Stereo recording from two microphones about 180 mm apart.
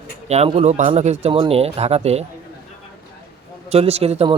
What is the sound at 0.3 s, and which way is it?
Speech, 35° right (ahead or behind).